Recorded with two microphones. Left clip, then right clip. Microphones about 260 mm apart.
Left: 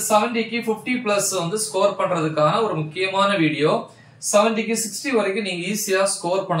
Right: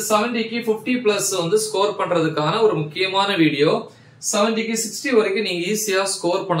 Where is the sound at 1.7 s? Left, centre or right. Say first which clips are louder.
Left 1 dB; centre.